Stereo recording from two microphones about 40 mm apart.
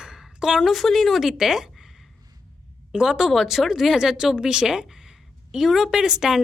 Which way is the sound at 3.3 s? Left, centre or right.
Centre.